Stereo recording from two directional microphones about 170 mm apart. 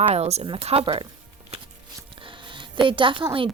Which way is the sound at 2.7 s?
30° right (ahead or behind).